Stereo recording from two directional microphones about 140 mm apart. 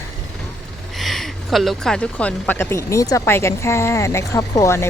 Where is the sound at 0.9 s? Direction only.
Centre (ahead or behind).